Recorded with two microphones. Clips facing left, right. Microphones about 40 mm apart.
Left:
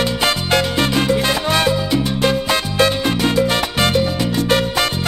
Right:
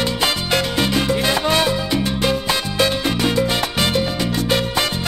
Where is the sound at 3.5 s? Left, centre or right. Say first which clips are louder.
Left 2 dB; centre.